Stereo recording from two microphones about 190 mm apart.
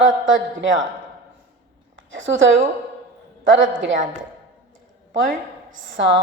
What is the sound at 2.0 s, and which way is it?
A woman's voice, 90° right.